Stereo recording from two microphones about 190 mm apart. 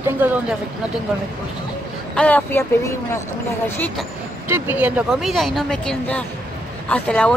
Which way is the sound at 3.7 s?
5° left (ahead or behind).